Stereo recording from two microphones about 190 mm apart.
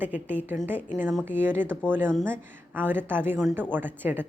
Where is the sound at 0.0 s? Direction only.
10° right (ahead or behind).